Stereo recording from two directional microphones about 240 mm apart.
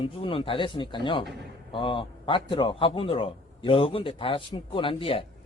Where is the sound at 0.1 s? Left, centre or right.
Left.